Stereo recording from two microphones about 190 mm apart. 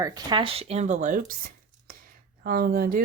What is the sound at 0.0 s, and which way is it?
Speech, 20° right (ahead or behind).